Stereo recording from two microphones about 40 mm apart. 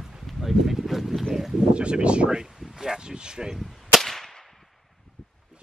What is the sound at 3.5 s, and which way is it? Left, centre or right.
Whip, centre.